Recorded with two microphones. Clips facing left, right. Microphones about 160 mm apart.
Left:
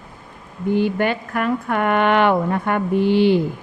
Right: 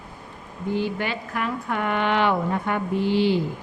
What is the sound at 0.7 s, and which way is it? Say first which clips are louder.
Speech: left 7 dB; 55° left (ahead or behind).